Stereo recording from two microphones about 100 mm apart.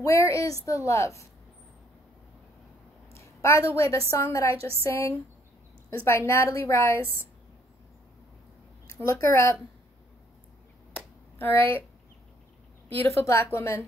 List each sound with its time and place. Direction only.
0.0 s a woman's voice: 30° left (ahead or behind)
3.1 s a sound: 30° left (ahead or behind)
3.7 s a woman's voice: 30° left (ahead or behind)
9.0 s a woman's voice: 25° left (ahead or behind)
11.3 s a woman's voice: 20° left (ahead or behind)
12.9 s a woman's voice: 25° left (ahead or behind)